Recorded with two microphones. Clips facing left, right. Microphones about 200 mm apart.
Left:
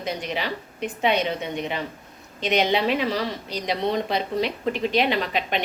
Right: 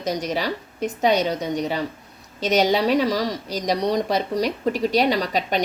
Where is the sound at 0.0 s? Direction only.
40° right (ahead or behind).